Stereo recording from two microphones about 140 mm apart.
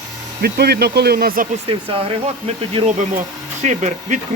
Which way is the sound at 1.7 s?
40° right (ahead or behind).